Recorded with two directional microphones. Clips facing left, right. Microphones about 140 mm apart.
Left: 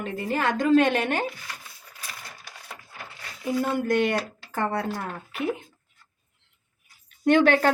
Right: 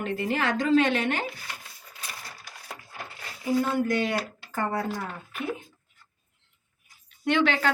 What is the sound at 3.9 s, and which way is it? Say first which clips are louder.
Speech: left 3 dB; 60° left (ahead or behind).